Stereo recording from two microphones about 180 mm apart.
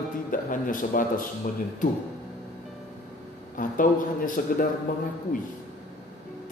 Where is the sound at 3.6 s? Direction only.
50° left (ahead or behind).